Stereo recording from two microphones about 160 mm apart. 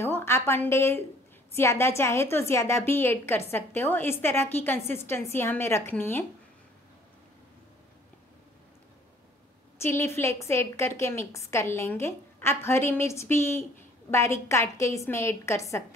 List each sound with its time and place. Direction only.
0.0 s a woman's voice: 15° left (ahead or behind)
9.8 s a woman's voice: 15° left (ahead or behind)